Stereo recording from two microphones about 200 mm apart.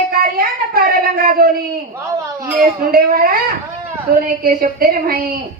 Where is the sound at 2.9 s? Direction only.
45° right (ahead or behind).